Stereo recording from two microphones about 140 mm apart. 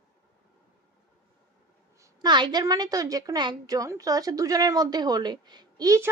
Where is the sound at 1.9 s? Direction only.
20° right (ahead or behind).